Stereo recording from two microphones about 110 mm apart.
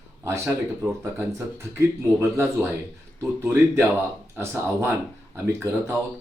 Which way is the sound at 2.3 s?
25° right (ahead or behind).